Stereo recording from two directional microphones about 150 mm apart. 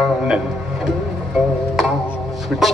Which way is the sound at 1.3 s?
5° right (ahead or behind).